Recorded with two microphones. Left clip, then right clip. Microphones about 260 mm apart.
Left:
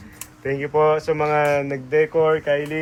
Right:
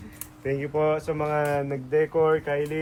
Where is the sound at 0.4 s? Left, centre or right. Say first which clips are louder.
Left 6 dB; centre.